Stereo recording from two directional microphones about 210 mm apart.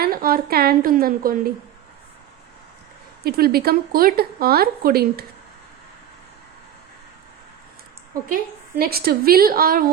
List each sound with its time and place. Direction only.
0.0 s speech: 45° right (ahead or behind)
3.2 s speech: 45° right (ahead or behind)
8.3 s speech: 45° right (ahead or behind)